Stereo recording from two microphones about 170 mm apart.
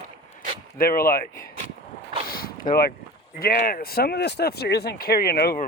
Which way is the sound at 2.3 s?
60° left (ahead or behind).